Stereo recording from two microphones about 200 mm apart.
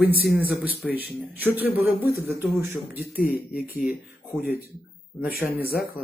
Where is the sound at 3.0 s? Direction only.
45° left (ahead or behind).